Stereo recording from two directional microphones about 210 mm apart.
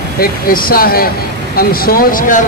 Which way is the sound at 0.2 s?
45° left (ahead or behind).